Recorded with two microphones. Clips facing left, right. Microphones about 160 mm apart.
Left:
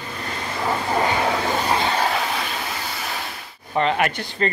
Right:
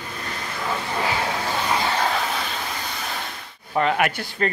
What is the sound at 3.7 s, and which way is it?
Speech, 5° right (ahead or behind).